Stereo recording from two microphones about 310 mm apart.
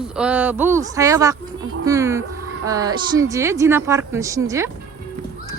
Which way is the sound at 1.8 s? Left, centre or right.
Centre.